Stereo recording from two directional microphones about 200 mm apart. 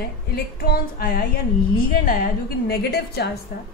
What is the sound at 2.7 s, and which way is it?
Speech, 50° left (ahead or behind).